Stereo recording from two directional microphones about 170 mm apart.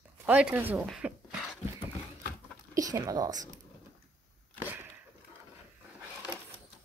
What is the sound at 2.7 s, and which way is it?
Speech, 20° right (ahead or behind).